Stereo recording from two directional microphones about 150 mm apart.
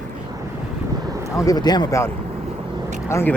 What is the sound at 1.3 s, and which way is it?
Speech, 25° left (ahead or behind).